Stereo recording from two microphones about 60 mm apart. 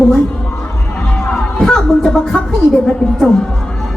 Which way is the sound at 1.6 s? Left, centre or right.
Centre.